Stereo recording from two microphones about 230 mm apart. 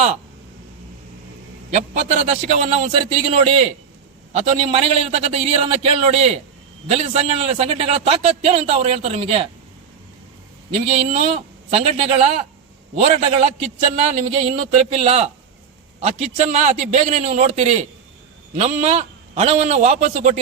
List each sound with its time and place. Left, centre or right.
1.7 s a man's voice: right
10.9 s a man's voice: right